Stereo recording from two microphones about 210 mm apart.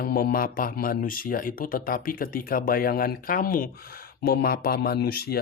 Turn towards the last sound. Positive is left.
turn(degrees=45)  # may be behind; listen again after turning